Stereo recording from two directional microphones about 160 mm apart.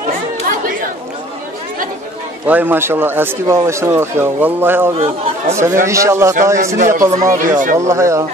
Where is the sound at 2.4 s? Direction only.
10° right (ahead or behind).